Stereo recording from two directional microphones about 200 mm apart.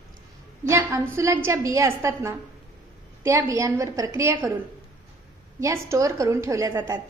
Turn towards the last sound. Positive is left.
turn(degrees=-15)  # may be behind; listen again after turning